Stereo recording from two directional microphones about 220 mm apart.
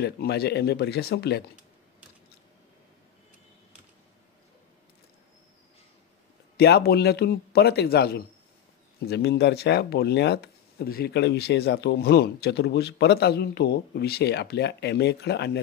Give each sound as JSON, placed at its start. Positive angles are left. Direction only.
{"t": 0.0, "sound": "speech", "side_deg": 45}
{"t": 6.5, "sound": "speech", "side_deg": 45}